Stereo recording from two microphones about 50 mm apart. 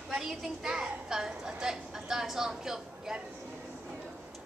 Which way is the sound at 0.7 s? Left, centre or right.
Centre.